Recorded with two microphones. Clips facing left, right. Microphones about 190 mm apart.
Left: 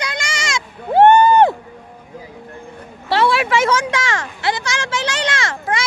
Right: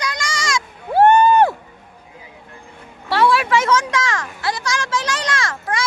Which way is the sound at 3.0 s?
25° left (ahead or behind).